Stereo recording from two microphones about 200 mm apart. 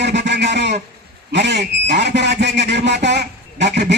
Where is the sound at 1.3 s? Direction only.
60° right (ahead or behind).